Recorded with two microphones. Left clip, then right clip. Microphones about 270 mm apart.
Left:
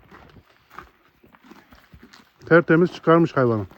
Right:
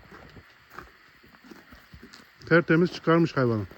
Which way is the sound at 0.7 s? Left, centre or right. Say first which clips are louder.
Left 3 dB; left.